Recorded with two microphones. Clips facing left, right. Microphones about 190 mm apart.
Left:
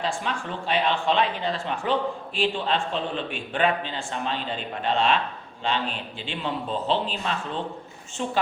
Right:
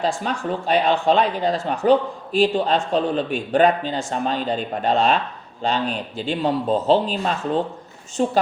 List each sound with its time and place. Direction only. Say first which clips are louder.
0.2 s speech: right 6 dB; 40° right (ahead or behind)